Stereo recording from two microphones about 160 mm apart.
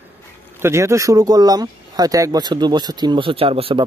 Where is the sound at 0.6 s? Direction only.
15° right (ahead or behind).